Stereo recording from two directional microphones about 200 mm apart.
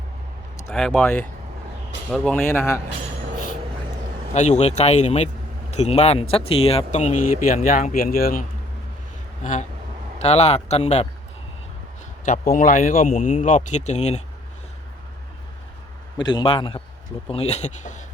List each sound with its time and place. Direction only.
0.7 s a man's voice: 5° left (ahead or behind)
4.4 s speech: 35° left (ahead or behind)
12.2 s speech: 40° left (ahead or behind)
16.1 s a man's voice: 20° left (ahead or behind); by 18.0 s 35° left (ahead or behind)